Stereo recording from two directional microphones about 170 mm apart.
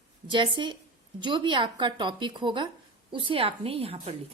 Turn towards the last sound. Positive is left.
turn(degrees=-35)  # may be behind; listen again after turning